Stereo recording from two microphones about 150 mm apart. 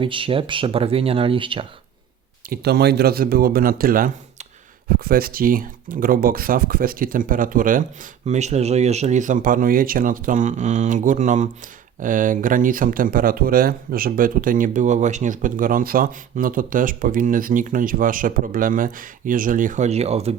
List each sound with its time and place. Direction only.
0.0 s speech: 35° right (ahead or behind)
2.5 s speech: 90° right; by 7.9 s 65° right (ahead or behind)
8.3 s speech: 50° right (ahead or behind)